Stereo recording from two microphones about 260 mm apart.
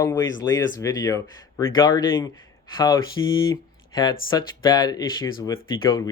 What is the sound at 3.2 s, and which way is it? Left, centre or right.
Speech, centre.